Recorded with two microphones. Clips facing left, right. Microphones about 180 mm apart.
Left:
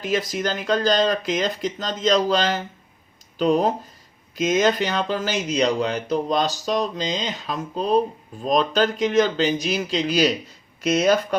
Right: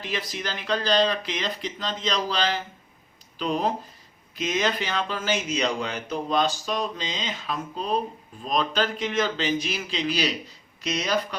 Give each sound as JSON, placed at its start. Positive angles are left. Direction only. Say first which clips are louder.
{"t": 0.0, "sound": "speech", "louder": "left 8 dB", "side_deg": 45}